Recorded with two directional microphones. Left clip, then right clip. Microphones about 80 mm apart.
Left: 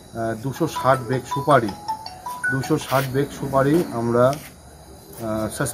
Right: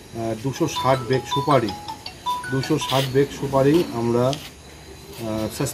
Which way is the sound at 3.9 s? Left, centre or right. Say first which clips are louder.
Left 3 dB; left.